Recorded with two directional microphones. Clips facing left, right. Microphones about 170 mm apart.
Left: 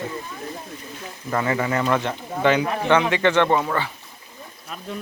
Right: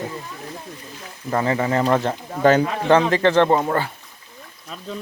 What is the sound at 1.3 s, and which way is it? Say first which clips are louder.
Speech: right 2 dB; 30° right (ahead or behind).